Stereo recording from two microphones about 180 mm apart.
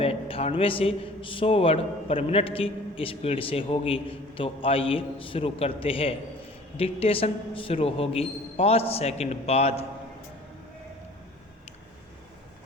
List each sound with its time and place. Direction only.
0.0 s a man's voice: 30° left (ahead or behind)